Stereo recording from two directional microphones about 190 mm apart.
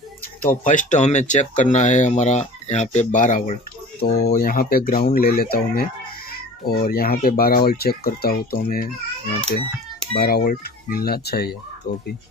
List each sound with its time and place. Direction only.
0.7 s speech: 40° left (ahead or behind)
4.0 s speech: 55° left (ahead or behind)
10.1 s speech: 50° left (ahead or behind)